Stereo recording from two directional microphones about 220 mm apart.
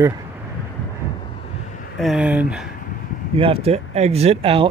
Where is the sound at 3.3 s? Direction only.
25° right (ahead or behind).